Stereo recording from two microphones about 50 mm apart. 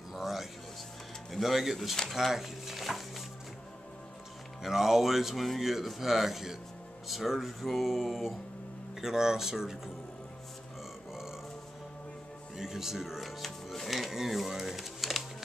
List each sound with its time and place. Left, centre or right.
0.1 s music: centre
1.3 s speech: centre
4.6 s speech: centre
12.5 s speech: centre